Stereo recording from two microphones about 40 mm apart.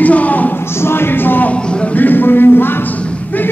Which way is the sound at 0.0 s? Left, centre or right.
Left.